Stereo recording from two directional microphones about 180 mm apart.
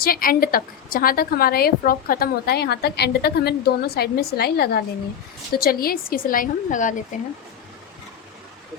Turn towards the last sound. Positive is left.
turn(degrees=45)  # may be behind; listen again after turning